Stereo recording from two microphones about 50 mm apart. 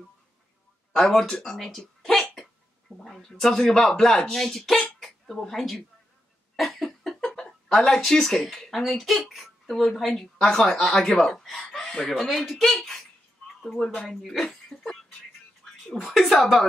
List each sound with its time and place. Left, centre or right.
0.9 s speech: centre
1.6 s a sound: centre
3.0 s speech: centre
6.5 s cough: centre
7.0 s speech: centre
12.3 s speech: centre
15.9 s speech: centre